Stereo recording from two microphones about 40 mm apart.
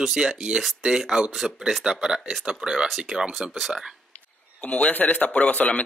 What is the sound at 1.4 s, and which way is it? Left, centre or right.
Speech, centre.